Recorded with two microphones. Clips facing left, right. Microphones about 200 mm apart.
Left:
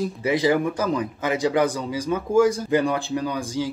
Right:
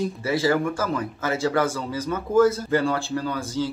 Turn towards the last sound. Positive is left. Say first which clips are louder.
# left 1 dB
turn(degrees=15)  # may be behind; listen again after turning